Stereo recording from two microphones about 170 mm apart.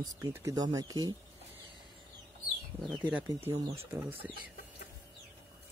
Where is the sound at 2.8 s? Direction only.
5° right (ahead or behind).